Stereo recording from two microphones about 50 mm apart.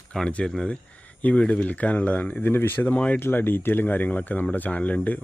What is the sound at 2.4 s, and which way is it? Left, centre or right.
Speech, left.